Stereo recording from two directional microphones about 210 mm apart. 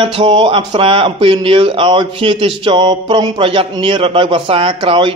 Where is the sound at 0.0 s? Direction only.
25° right (ahead or behind).